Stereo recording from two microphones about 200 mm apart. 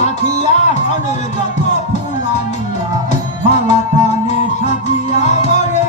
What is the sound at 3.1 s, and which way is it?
Music, 35° left (ahead or behind).